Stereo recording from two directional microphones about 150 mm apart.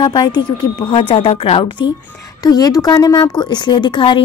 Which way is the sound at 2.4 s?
25° left (ahead or behind).